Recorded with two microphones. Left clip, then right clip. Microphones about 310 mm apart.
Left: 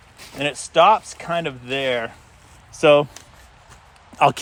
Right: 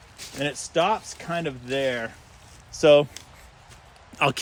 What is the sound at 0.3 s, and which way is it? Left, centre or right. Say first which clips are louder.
Speech: left 7 dB; centre.